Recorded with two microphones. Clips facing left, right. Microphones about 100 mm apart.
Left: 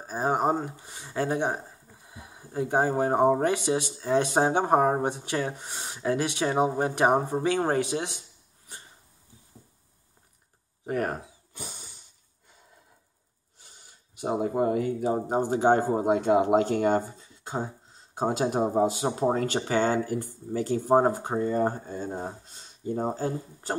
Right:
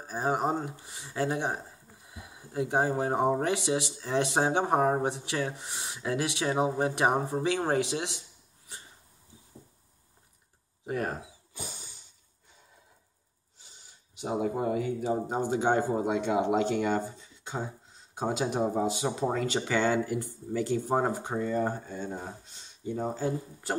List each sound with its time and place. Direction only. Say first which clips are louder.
0.1 s speech: left 3 dB; 35° left (ahead or behind)
7.7 s speech: left 2 dB; 40° left (ahead or behind)
10.9 s speech: left 3 dB; 50° left (ahead or behind)
13.6 s a sound: left 2 dB; 50° left (ahead or behind)
14.4 s speech: left 4 dB; 45° left (ahead or behind)